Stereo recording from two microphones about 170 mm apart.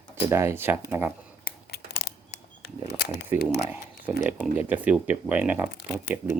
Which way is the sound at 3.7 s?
10° right (ahead or behind).